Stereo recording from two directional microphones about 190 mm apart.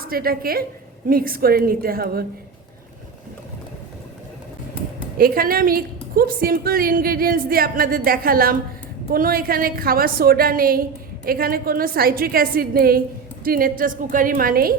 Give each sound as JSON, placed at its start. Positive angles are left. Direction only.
{"t": 0.0, "sound": "a woman's voice", "side_deg": -50}
{"t": 5.1, "sound": "a woman's voice", "side_deg": -50}